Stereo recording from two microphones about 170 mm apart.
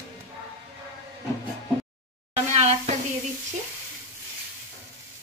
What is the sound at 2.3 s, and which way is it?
Sizzle, 40° right (ahead or behind).